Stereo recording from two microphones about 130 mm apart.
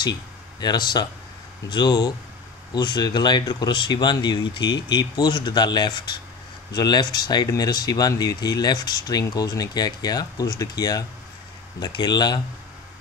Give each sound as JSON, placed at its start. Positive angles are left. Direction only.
{"t": 0.6, "sound": "speech", "side_deg": 30}